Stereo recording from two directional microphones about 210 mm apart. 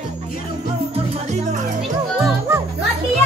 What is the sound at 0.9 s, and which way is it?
Music, 30° right (ahead or behind).